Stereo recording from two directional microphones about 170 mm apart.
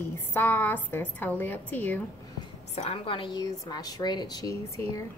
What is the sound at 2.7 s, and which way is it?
A woman's voice, 35° left (ahead or behind).